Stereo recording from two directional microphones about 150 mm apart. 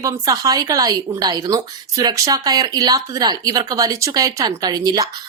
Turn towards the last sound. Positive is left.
turn(degrees=-25)  # may be behind; listen again after turning